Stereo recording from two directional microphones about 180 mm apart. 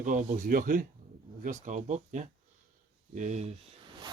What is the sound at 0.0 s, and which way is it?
Speech, 45° right (ahead or behind).